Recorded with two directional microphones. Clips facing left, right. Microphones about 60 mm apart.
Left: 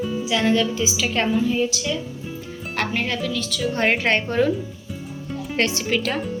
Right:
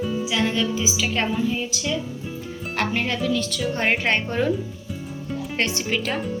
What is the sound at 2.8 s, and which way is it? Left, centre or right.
Speech, right.